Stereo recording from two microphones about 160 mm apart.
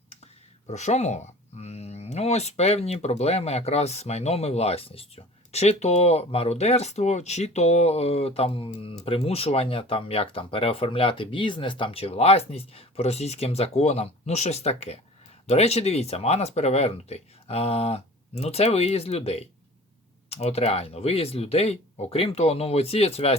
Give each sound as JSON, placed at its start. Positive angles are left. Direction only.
{"t": 0.7, "sound": "speech", "side_deg": 45}